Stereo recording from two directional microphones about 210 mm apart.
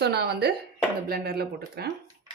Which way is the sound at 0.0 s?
50° right (ahead or behind).